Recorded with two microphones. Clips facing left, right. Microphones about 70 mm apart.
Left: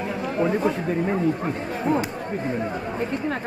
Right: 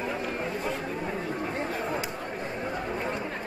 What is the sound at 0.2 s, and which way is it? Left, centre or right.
Chatter, left.